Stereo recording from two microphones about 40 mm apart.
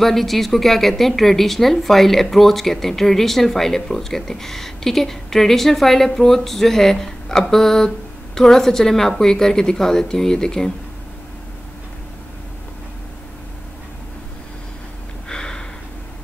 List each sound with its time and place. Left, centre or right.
0.0 s a woman's voice: centre
15.2 s gasp: centre